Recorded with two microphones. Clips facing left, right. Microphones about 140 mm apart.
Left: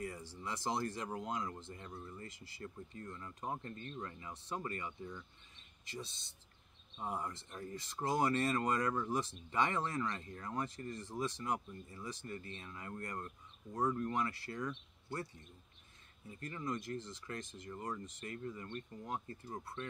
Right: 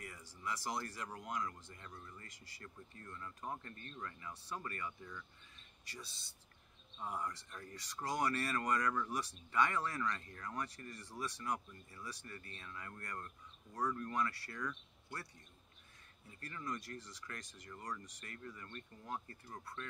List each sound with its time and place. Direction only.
0.0 s speech: 30° left (ahead or behind)
16.3 s speech: 20° left (ahead or behind)